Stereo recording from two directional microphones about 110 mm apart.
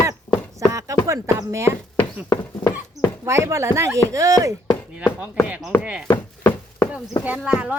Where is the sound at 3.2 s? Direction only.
25° right (ahead or behind).